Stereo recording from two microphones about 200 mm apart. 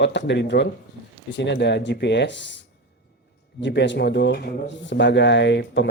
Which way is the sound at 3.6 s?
65° left (ahead or behind).